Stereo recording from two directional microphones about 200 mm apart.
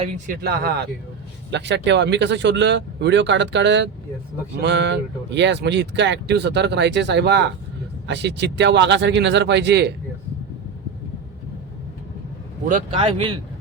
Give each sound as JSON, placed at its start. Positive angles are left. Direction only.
{"t": 0.4, "sound": "speech", "side_deg": -50}
{"t": 13.0, "sound": "a man's voice", "side_deg": -25}